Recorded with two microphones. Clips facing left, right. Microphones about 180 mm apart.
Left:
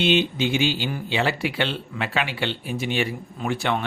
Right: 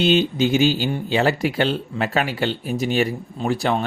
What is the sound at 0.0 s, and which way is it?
Speech, 40° right (ahead or behind).